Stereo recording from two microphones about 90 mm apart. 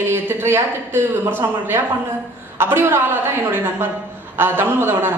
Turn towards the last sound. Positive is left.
turn(degrees=-25)  # may be behind; listen again after turning